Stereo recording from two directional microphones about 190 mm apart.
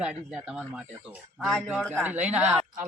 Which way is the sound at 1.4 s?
Centre (ahead or behind).